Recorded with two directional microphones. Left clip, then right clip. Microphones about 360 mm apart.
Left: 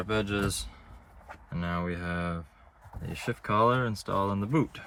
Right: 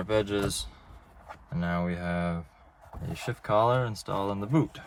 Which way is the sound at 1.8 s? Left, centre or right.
Centre.